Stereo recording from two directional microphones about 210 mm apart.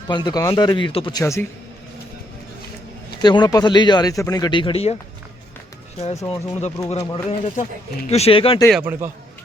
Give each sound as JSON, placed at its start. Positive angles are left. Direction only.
{"t": 0.1, "sound": "a man's voice", "side_deg": 20}
{"t": 3.2, "sound": "speech", "side_deg": 20}
{"t": 6.0, "sound": "speech", "side_deg": 30}
{"t": 8.7, "sound": "a man's voice", "side_deg": -10}